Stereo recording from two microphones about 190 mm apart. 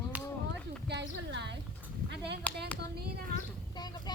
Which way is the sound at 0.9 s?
65° right (ahead or behind).